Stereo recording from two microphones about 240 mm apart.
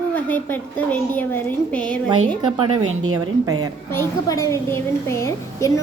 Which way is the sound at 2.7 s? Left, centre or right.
Right.